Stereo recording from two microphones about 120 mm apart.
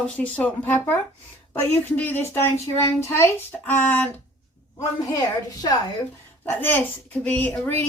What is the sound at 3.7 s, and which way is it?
Speech, 10° left (ahead or behind).